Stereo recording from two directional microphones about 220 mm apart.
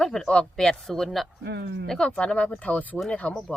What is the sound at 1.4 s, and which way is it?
Speech, 50° right (ahead or behind).